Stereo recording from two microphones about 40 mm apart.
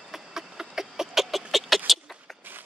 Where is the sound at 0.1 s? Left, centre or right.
Centre.